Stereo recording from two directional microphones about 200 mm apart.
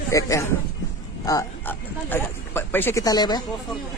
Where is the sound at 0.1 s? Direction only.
15° left (ahead or behind).